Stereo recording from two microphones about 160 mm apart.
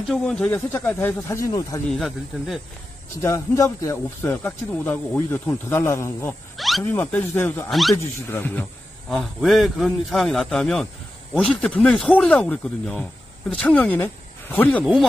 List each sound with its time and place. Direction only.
0.1 s speech: 5° left (ahead or behind)
1.9 s a man's voice: centre (ahead or behind)
3.2 s speech: 15° left (ahead or behind)
6.5 s a sound: centre (ahead or behind)
6.8 s speech: 10° left (ahead or behind)
7.7 s a man's voice: centre (ahead or behind)
8.3 s speech: 10° left (ahead or behind)
9.1 s a man's voice: centre (ahead or behind)